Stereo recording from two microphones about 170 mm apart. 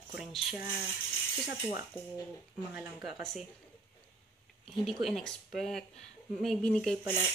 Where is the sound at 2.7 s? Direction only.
10° right (ahead or behind).